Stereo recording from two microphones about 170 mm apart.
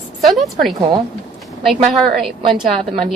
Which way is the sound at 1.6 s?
Centre (ahead or behind).